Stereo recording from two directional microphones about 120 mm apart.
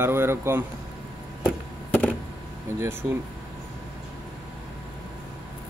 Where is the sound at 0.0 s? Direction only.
20° right (ahead or behind).